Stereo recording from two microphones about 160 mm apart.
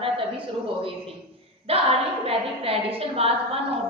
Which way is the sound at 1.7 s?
35° right (ahead or behind).